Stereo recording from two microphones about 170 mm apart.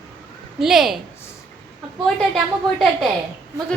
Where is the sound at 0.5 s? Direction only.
Centre (ahead or behind).